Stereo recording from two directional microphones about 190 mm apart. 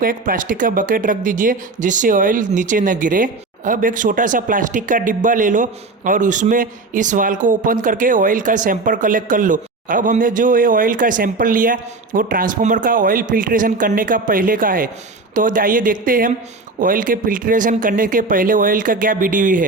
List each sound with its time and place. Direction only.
0.0 s a man's voice: 45° right (ahead or behind)